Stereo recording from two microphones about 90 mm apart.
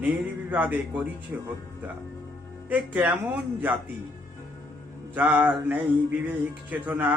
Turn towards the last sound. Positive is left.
turn(degrees=-20)  # may be behind; listen again after turning